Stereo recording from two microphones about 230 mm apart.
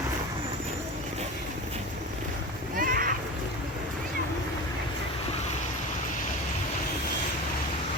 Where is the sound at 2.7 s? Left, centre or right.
Right.